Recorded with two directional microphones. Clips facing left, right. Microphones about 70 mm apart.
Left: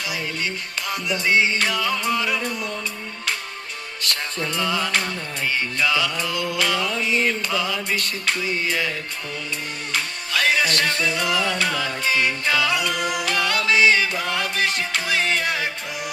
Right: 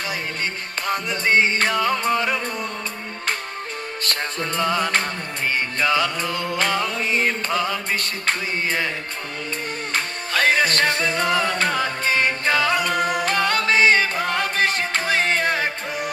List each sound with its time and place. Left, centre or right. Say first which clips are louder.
0.9 s music: right 2 dB; right
4.0 s music: even; right
9.9 s music: right 1 dB; right